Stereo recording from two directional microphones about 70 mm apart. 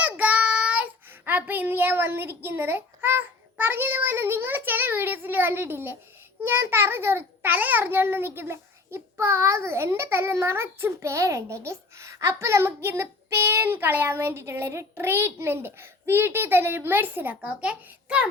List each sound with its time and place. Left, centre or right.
0.0 s child singing: right
1.2 s a child's voice: right